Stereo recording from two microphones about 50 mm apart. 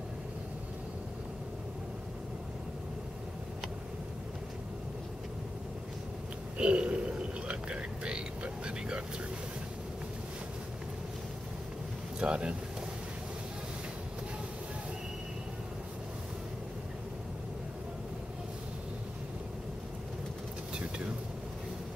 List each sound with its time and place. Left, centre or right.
6.6 s a sound: right
8.6 s vehicle: centre
12.2 s speech: centre